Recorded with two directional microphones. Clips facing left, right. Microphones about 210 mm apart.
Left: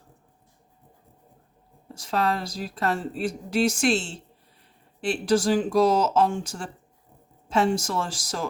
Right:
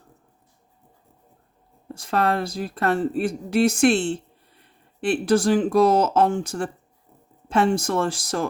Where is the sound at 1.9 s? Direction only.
55° right (ahead or behind).